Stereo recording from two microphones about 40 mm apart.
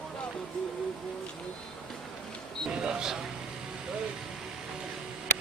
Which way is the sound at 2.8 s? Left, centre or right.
Centre.